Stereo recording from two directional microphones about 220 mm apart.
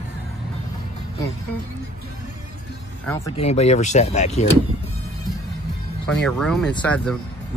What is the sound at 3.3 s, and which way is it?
Speech, 30° left (ahead or behind).